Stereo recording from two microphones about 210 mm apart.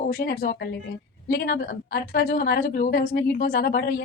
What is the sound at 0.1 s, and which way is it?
A woman's voice, 45° left (ahead or behind).